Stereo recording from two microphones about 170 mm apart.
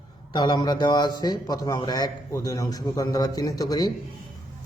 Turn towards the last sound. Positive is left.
turn(degrees=25)  # may be behind; listen again after turning